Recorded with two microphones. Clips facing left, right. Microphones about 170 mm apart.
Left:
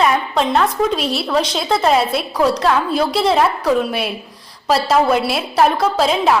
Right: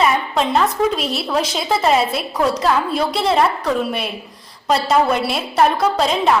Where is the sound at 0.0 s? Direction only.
Centre (ahead or behind).